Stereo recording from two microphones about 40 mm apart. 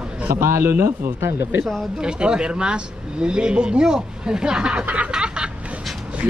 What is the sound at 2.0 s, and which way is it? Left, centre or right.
Speech, right.